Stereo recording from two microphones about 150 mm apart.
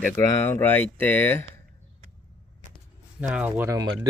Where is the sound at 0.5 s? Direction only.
15° left (ahead or behind).